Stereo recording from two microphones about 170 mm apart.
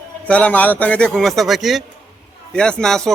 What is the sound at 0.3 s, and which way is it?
Speech, 10° left (ahead or behind).